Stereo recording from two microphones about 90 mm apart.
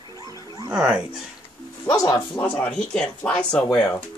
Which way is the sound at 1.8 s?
45° left (ahead or behind).